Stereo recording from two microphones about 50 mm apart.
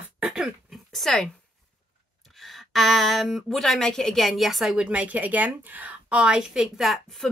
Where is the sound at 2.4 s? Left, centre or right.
Centre.